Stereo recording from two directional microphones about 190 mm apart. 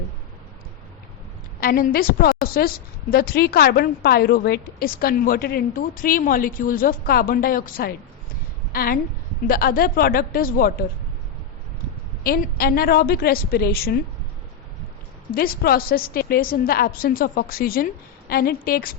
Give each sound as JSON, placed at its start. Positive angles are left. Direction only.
{"t": 1.6, "sound": "a woman's voice", "side_deg": 50}
{"t": 12.2, "sound": "a woman's voice", "side_deg": 50}
{"t": 15.3, "sound": "a woman's voice", "side_deg": 50}